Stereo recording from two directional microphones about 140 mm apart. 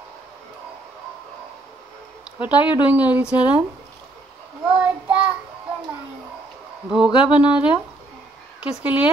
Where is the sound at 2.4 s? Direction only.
35° left (ahead or behind).